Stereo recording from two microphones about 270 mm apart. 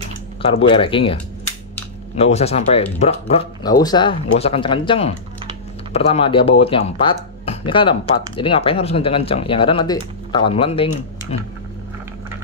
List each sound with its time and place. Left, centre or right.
0.4 s speech: centre
2.1 s speech: left